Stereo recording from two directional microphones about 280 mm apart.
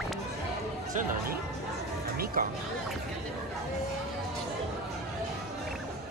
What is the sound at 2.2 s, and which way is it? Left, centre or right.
Music, right.